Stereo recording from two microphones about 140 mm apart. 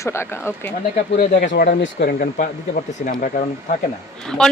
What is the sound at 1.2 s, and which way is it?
Speech, 80° left.